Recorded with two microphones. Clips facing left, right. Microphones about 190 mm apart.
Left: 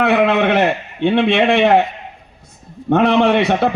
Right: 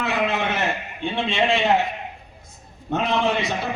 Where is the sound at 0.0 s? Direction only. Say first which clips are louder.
Left 10 dB; 65° left (ahead or behind).